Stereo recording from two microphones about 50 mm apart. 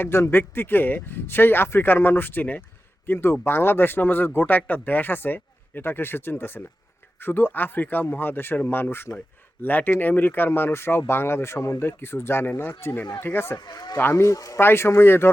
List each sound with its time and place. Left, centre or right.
0.0 s speech: left
3.1 s speech: left
9.1 s speech: left
11.8 s speech: left
14.2 s speech: left
14.6 s speech: left